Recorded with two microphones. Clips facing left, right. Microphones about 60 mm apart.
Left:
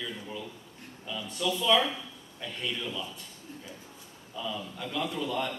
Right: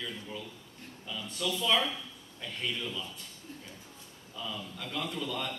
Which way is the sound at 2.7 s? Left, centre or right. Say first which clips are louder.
Left 2 dB; centre.